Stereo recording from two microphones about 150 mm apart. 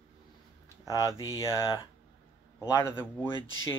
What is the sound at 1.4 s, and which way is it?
Speech, 25° left (ahead or behind).